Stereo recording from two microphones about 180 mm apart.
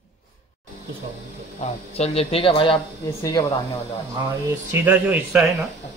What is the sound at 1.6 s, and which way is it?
Speech, 35° left (ahead or behind).